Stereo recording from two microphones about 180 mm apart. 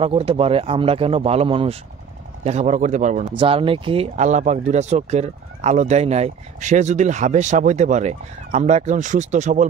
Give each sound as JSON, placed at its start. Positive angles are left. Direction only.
{"t": 0.0, "sound": "speech", "side_deg": -30}
{"t": 3.3, "sound": "speech", "side_deg": -30}